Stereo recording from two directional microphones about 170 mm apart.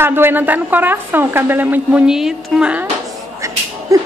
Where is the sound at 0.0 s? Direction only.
15° right (ahead or behind).